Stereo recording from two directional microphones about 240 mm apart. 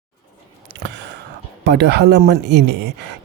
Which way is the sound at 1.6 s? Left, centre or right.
Right.